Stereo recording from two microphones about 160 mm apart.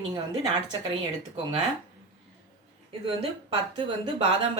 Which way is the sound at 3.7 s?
30° right (ahead or behind).